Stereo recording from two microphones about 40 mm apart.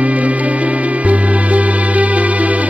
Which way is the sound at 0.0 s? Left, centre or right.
Right.